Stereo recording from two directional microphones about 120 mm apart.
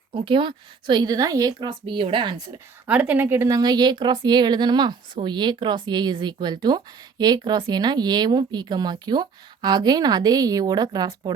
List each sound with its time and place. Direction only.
0.1 s speech: 45° right (ahead or behind)
2.8 s speech: 10° right (ahead or behind)
3.6 s speech: 35° right (ahead or behind)